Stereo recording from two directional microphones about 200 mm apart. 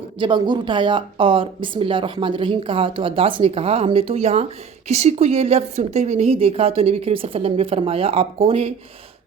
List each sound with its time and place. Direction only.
0.2 s speech: 20° right (ahead or behind)